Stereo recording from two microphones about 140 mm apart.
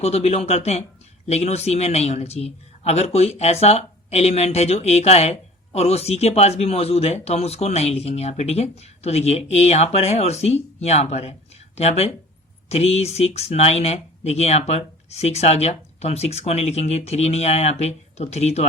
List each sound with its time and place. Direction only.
0.0 s speech: 50° left (ahead or behind)